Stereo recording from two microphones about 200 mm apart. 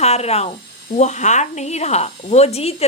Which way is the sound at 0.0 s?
30° left (ahead or behind).